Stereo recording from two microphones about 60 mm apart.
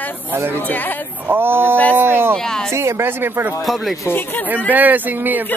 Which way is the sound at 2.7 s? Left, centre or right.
Right.